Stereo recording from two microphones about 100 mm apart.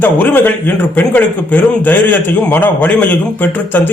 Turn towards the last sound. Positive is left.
turn(degrees=20)  # may be behind; listen again after turning